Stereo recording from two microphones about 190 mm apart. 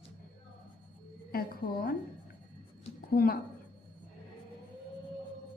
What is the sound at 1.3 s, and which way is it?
Speech, 50° left (ahead or behind).